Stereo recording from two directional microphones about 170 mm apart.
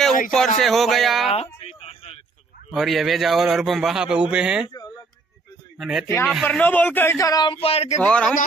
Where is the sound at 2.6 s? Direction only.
Centre (ahead or behind).